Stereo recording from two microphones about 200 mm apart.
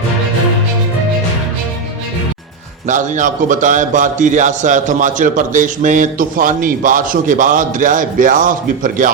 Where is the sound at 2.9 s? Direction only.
40° right (ahead or behind).